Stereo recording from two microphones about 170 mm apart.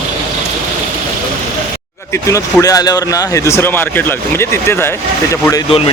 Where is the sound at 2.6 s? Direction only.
20° left (ahead or behind).